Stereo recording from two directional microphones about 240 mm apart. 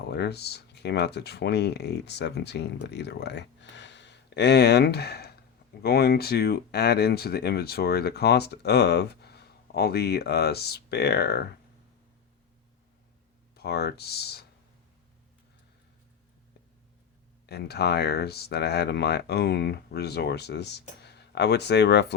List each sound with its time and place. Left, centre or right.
0.1 s speech: left
13.6 s speech: left
17.4 s speech: left